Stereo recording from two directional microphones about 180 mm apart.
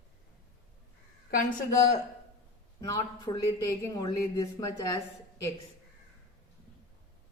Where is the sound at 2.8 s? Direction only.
20° left (ahead or behind).